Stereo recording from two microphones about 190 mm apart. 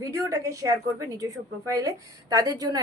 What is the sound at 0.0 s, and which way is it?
Speech, 15° right (ahead or behind).